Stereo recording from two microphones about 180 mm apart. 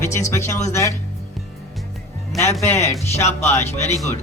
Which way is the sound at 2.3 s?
15° left (ahead or behind).